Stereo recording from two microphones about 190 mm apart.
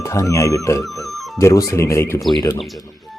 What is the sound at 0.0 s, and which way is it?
Speech, 15° left (ahead or behind).